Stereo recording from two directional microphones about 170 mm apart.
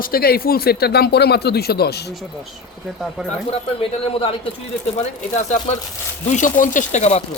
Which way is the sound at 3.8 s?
30° left (ahead or behind).